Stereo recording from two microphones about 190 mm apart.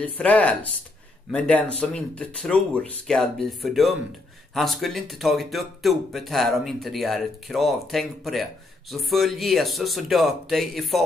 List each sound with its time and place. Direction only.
0.0 s speech: 5° left (ahead or behind)